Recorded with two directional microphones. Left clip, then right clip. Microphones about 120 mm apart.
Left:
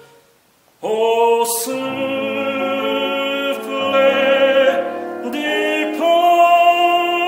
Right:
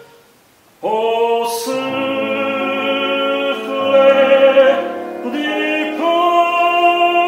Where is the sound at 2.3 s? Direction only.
30° left (ahead or behind).